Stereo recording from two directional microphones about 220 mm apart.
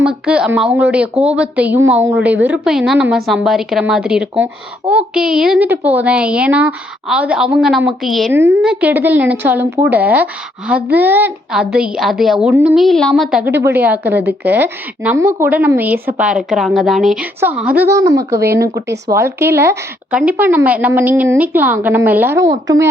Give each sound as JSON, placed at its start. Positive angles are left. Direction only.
{"t": 0.0, "sound": "a woman's voice", "side_deg": -5}